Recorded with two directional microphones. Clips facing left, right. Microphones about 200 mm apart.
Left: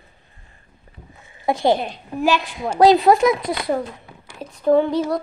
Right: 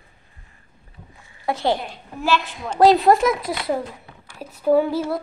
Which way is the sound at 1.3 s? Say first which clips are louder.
Left 4 dB; 20° left (ahead or behind).